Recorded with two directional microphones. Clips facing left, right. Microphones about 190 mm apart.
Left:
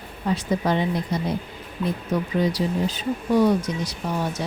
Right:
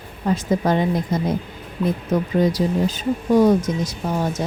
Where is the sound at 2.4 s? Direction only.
45° right (ahead or behind).